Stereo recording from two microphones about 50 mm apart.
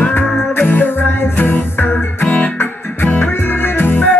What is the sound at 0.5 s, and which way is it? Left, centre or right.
Music, left.